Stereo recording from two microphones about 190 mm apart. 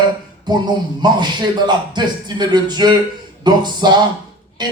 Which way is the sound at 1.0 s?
20° right (ahead or behind).